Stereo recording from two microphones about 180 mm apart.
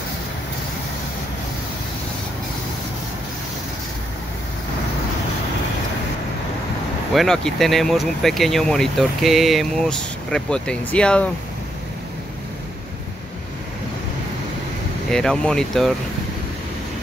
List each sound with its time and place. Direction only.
7.2 s speech: centre (ahead or behind)
15.0 s speech: 5° left (ahead or behind)